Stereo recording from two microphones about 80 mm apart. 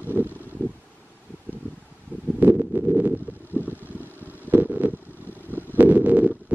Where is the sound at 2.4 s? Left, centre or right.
Right.